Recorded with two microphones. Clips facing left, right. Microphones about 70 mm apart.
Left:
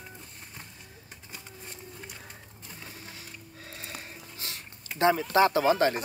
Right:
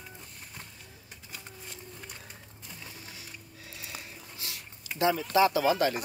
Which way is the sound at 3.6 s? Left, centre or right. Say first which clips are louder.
Left 2 dB; left.